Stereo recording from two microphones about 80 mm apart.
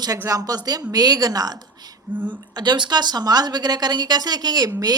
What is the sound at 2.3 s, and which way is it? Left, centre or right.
A woman's voice, right.